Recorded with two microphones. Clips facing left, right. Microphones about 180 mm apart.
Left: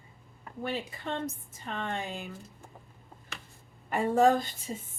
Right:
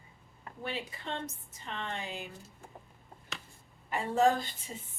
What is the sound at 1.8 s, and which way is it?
Speech, 50° left (ahead or behind).